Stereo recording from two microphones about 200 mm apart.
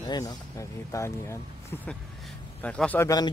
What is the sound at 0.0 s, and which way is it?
Speech, 20° left (ahead or behind).